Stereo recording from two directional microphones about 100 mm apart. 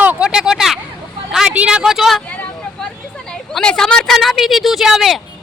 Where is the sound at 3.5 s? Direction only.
5° left (ahead or behind).